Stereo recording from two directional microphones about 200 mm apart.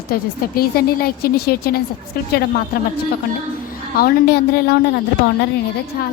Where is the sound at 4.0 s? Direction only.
50° left (ahead or behind).